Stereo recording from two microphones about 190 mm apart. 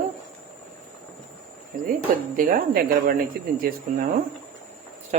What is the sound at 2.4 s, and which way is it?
Speech, 45° right (ahead or behind).